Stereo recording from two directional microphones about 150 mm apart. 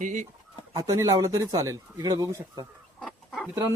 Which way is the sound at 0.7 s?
20° right (ahead or behind).